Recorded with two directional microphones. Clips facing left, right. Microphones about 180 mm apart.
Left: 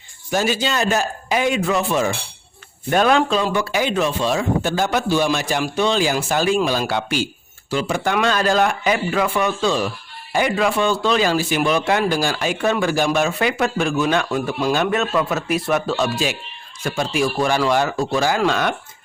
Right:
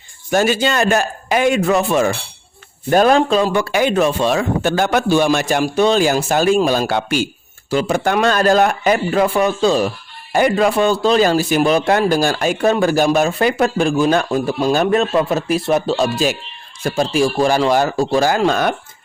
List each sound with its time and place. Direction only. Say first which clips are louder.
0.3 s speech: right 5 dB; 55° right (ahead or behind)
2.9 s speech: right 4 dB; 40° right (ahead or behind)